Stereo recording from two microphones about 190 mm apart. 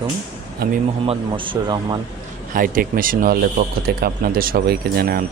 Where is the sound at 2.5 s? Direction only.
45° right (ahead or behind).